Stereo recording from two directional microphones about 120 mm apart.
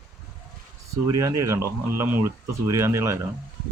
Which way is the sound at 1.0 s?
30° right (ahead or behind).